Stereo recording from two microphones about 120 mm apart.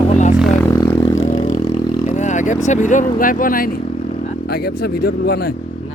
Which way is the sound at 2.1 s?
85° left.